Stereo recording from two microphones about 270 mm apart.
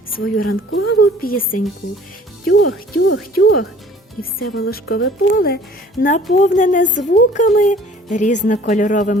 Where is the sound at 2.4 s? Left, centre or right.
Left.